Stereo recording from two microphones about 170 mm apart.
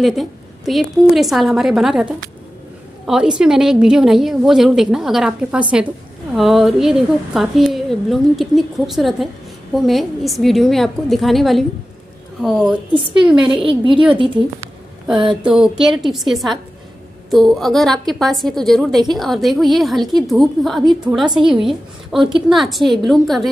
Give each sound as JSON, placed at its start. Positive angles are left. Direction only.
{"t": 0.0, "sound": "a woman's voice", "side_deg": 0}
{"t": 3.1, "sound": "a woman's voice", "side_deg": -5}
{"t": 13.5, "sound": "a woman's voice", "side_deg": -30}
{"t": 15.4, "sound": "a woman's voice", "side_deg": -5}